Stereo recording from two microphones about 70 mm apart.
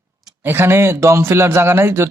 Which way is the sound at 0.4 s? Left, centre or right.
Right.